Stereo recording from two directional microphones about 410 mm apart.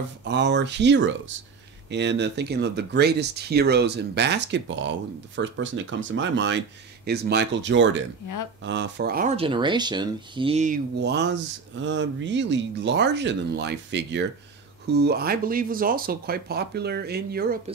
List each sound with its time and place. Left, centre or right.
0.2 s speech: right